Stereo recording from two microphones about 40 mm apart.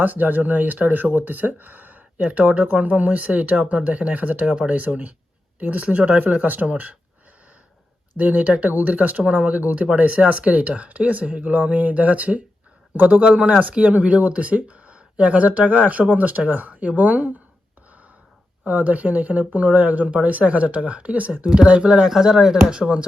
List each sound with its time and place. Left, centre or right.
0.0 s speech: right
8.2 s speech: right
18.6 s speech: right
21.4 s speech: right
22.0 s speech: centre